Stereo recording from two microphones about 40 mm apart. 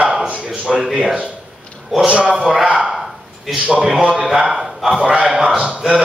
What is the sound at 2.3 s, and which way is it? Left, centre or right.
Speech, centre.